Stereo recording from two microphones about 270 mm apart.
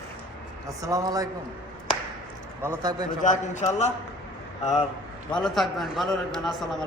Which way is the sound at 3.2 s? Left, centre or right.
Left.